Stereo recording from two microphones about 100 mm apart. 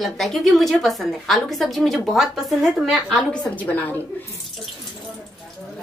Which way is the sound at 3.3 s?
15° left (ahead or behind).